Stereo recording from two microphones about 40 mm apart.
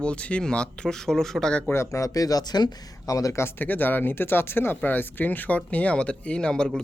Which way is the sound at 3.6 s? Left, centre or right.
Left.